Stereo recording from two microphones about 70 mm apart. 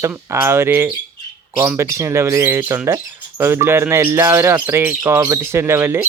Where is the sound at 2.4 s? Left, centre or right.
Right.